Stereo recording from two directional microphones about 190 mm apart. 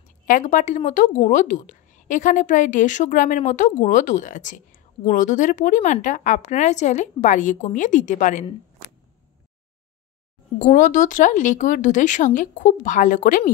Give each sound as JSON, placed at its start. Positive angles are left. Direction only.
{"t": 0.3, "sound": "a woman's voice", "side_deg": 40}
{"t": 10.6, "sound": "speech", "side_deg": 40}